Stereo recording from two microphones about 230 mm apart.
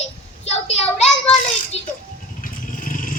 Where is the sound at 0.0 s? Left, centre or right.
Left.